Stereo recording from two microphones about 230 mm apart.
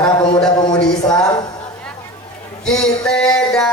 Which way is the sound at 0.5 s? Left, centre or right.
Centre.